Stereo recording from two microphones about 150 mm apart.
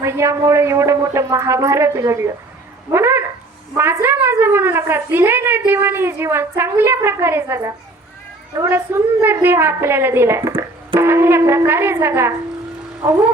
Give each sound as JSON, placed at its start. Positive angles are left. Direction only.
{"t": 0.0, "sound": "a woman's voice", "side_deg": -20}